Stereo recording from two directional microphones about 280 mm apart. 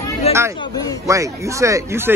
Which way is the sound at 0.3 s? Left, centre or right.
Centre.